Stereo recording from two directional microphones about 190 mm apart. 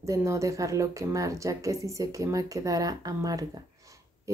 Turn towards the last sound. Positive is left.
turn(degrees=-15)  # may be behind; listen again after turning